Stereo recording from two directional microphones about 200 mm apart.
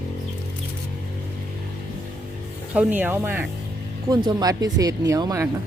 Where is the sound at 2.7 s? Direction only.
5° right (ahead or behind).